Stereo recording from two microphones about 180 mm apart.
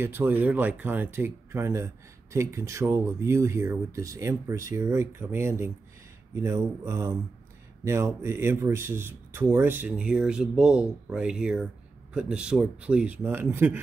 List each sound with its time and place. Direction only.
0.0 s speech: 10° right (ahead or behind)